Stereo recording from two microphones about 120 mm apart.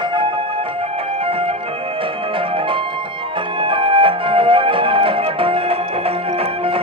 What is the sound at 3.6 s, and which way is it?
Music, 45° right (ahead or behind).